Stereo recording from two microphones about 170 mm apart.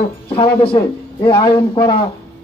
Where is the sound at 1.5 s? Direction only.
35° left (ahead or behind).